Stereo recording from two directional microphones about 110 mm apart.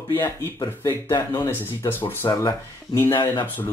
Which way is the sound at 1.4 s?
20° left (ahead or behind).